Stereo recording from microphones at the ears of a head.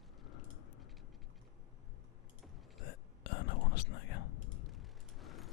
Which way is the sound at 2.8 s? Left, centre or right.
Left.